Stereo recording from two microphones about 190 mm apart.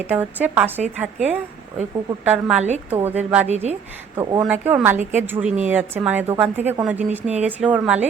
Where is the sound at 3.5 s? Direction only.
35° right (ahead or behind).